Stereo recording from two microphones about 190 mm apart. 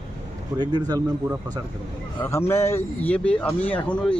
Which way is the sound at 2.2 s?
15° left (ahead or behind).